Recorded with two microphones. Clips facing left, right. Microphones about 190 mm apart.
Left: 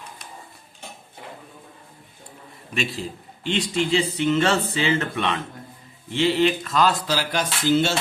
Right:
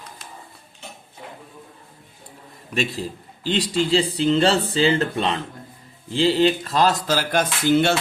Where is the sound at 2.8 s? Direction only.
40° right (ahead or behind).